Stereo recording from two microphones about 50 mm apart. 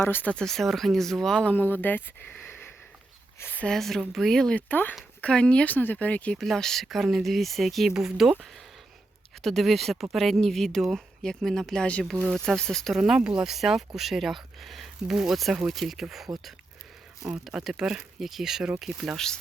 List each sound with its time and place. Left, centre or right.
0.0 s speech: left
0.4 s speech: centre
1.5 s speech: left
3.7 s speech: centre
4.5 s speech: left
5.2 s speech: left
5.7 s speech: left
6.4 s speech: centre
6.8 s speech: centre
9.4 s speech: centre
12.9 s speech: centre
15.0 s speech: centre
15.6 s speech: centre
19.1 s speech: centre